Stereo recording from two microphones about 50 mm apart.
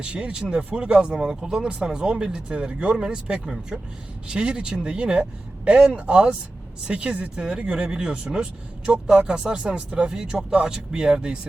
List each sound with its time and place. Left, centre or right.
0.0 s speech: right